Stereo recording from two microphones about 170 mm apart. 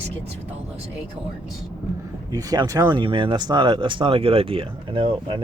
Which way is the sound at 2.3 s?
20° right (ahead or behind).